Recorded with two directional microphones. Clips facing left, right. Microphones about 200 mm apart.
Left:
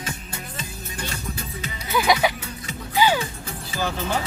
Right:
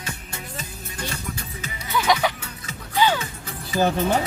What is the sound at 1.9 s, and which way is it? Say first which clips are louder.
Speech: left 1 dB; 10° left (ahead or behind).